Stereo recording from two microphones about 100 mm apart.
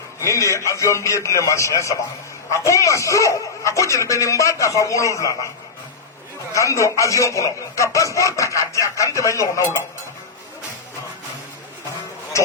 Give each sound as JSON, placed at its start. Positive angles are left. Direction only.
{"t": 0.2, "sound": "speech", "side_deg": 30}
{"t": 6.5, "sound": "speech", "side_deg": 30}